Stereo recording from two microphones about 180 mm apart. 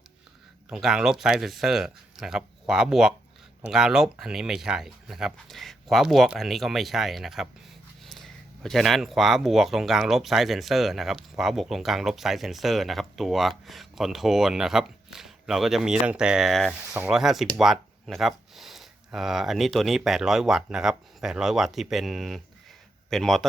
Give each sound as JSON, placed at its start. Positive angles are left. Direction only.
{"t": 0.7, "sound": "speech", "side_deg": -5}